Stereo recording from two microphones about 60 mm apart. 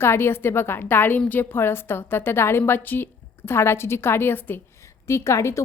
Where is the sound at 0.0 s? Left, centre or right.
Left.